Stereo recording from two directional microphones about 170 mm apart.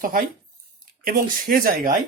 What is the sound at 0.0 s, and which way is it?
Speech, 55° right (ahead or behind).